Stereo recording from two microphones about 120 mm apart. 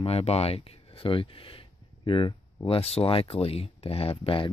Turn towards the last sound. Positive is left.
turn(degrees=50)  # may be behind; listen again after turning